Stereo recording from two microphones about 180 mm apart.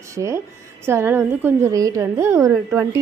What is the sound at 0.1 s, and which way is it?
A woman's voice, 15° right (ahead or behind).